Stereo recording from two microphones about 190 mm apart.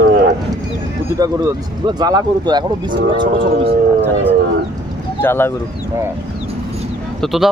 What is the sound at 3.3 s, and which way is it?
Speech, 85° right.